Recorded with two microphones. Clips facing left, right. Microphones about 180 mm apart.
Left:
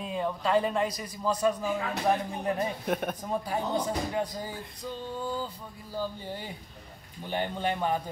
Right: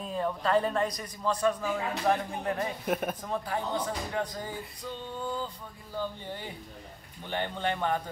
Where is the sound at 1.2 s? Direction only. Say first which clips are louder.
Left 1 dB; 10° left (ahead or behind).